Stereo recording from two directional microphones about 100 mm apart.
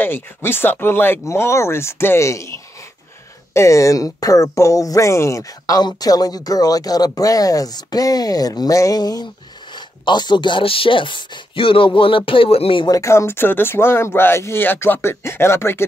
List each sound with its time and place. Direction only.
0.0 s speech: 20° left (ahead or behind)
3.5 s speech: 30° left (ahead or behind); by 12.8 s 80° left
12.8 s speech: 35° left (ahead or behind)